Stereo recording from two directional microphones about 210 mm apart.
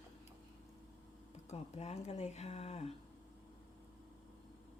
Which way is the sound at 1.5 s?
30° left (ahead or behind).